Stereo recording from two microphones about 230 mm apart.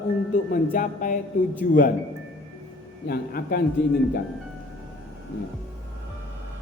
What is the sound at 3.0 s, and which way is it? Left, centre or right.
Speech, left.